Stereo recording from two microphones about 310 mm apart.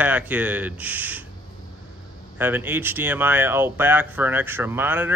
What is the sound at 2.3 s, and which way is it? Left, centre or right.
Speech, centre.